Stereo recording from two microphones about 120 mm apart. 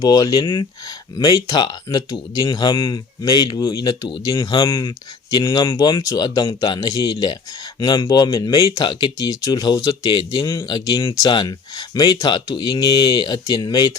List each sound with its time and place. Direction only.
0.0 s speech: 35° left (ahead or behind)
4.4 s speech: 45° left (ahead or behind)